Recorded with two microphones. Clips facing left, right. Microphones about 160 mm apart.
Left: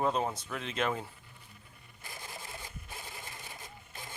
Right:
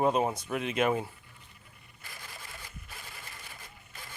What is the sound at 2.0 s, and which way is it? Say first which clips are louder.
Sewing machine: left 3 dB; 25° left (ahead or behind).